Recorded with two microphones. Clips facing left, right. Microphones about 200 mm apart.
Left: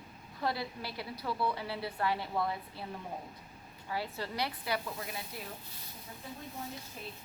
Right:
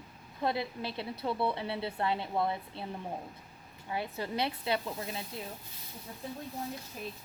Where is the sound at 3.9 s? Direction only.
20° right (ahead or behind).